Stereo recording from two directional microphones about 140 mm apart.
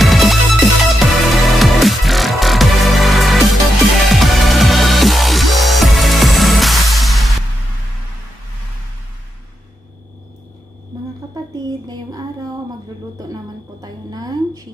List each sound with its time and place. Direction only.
0.0 s music: centre (ahead or behind)
11.5 s a sound: 25° right (ahead or behind)
13.3 s music: 25° right (ahead or behind)